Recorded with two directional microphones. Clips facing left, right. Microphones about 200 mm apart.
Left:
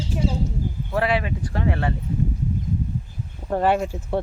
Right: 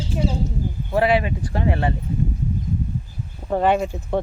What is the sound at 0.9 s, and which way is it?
Speech, 25° right (ahead or behind).